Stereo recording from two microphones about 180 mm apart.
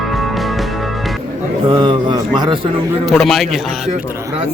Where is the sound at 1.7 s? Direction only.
25° right (ahead or behind).